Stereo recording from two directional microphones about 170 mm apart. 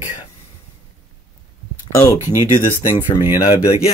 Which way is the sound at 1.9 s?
15° left (ahead or behind).